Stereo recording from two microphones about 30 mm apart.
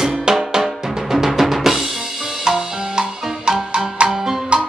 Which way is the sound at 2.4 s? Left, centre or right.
Centre.